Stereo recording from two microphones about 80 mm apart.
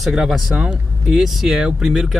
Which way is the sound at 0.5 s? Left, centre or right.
Centre.